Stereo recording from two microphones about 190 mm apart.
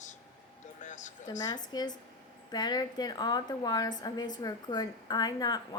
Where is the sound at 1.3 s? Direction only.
20° left (ahead or behind).